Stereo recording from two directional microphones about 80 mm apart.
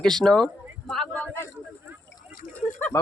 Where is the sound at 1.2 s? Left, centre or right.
Left.